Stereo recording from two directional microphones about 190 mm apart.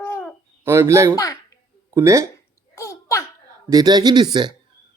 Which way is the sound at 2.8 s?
15° left (ahead or behind).